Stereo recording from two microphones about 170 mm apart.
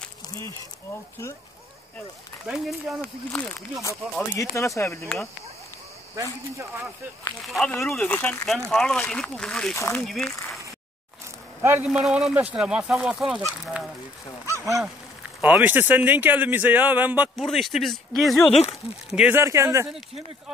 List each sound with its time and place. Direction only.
2.4 s speech: 5° right (ahead or behind)
3.0 s speech: 5° left (ahead or behind)
3.8 s speech: 15° left (ahead or behind)
5.0 s speech: 5° left (ahead or behind)
7.4 s speech: centre (ahead or behind)
9.8 s speech: 15° left (ahead or behind)
10.0 s speech: centre (ahead or behind)
11.6 s speech: 10° right (ahead or behind)
15.4 s a man's voice: 10° right (ahead or behind)
17.5 s a man's voice: centre (ahead or behind); by 19.9 s 15° right (ahead or behind)